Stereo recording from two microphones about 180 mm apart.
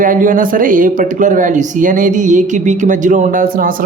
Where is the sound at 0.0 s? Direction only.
45° right (ahead or behind).